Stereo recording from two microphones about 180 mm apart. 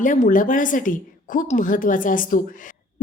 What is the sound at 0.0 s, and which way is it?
A woman's voice, 45° left (ahead or behind).